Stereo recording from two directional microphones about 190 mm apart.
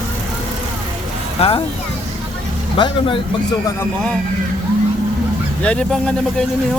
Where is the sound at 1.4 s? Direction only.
35° left (ahead or behind).